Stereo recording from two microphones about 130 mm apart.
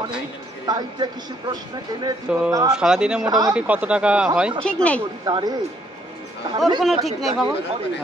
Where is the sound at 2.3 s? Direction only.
10° right (ahead or behind).